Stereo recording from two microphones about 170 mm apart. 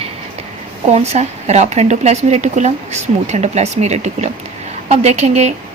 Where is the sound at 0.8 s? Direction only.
40° right (ahead or behind).